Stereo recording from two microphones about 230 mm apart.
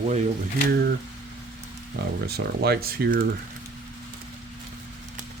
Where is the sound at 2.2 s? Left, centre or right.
Right.